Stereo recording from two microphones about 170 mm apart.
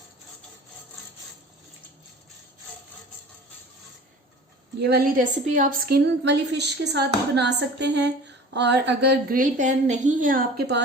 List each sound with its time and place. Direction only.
4.8 s a woman's voice: 65° right (ahead or behind); by 9.1 s 85° right
9.3 s a woman's voice: 50° right (ahead or behind)